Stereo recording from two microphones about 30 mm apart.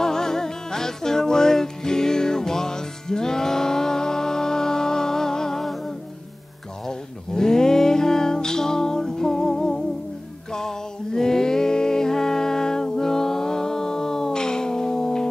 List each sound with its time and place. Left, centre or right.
0.0 s music: centre
5.6 s music: centre
6.9 s music: centre